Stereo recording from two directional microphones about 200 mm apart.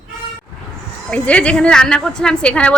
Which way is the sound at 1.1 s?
5° left (ahead or behind).